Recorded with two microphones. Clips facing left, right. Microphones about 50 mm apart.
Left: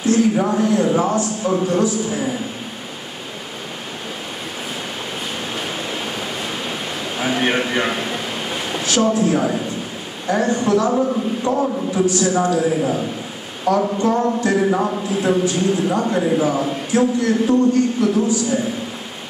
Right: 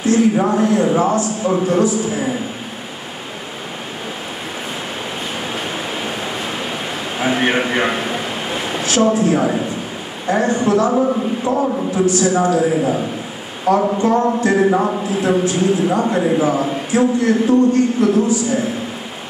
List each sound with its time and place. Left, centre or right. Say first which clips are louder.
0.0 s a man's voice: right 2 dB; centre
5.5 s waves: right 2 dB; centre
7.2 s a sound: right 2 dB; centre
10.2 s a man's voice: right 2 dB; centre